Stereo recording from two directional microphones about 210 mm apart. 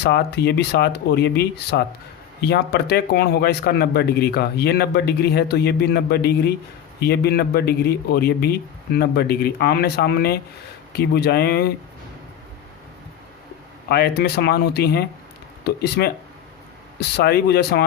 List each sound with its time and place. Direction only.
0.0 s speech: 50° left (ahead or behind)
13.9 s speech: 50° left (ahead or behind)